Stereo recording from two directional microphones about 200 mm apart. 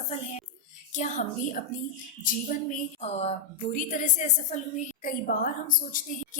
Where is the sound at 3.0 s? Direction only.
30° left (ahead or behind).